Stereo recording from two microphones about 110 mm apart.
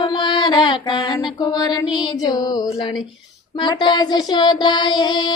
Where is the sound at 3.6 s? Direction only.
45° left (ahead or behind).